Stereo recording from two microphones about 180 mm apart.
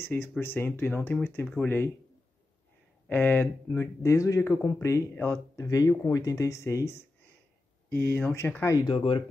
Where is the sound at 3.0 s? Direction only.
10° left (ahead or behind).